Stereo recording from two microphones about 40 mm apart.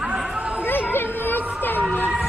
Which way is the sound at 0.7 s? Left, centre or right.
Left.